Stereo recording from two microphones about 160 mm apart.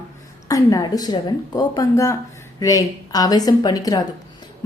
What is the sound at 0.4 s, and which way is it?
A woman's voice, 20° left (ahead or behind).